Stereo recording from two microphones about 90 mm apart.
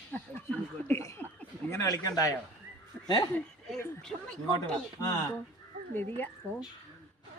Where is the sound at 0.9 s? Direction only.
35° left (ahead or behind).